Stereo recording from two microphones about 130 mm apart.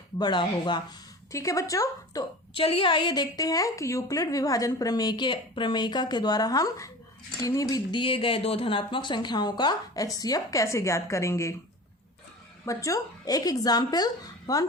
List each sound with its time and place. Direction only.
0.2 s a woman's voice: 35° left (ahead or behind)
1.3 s speech: 25° left (ahead or behind)
2.6 s a woman's voice: 45° left (ahead or behind); by 11.5 s 20° left (ahead or behind)
12.6 s speech: 25° left (ahead or behind)